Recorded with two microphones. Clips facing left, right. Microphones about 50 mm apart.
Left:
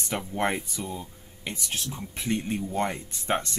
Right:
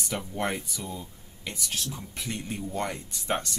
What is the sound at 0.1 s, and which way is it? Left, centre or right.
Speech, left.